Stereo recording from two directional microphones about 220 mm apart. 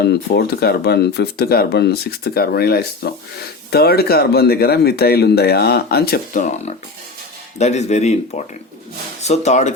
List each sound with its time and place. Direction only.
0.0 s speech: 45° left (ahead or behind)